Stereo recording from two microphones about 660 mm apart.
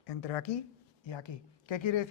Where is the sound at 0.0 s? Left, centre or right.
Left.